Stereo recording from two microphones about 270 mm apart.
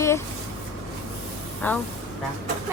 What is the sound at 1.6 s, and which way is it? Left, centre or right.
Speech, centre.